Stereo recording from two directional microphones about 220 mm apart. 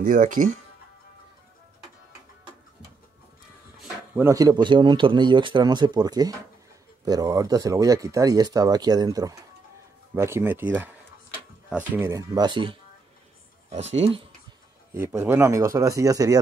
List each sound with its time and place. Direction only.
0.0 s speech: 35° right (ahead or behind)
3.8 s speech: 10° right (ahead or behind); by 14.2 s 25° right (ahead or behind)
15.0 s speech: 10° right (ahead or behind)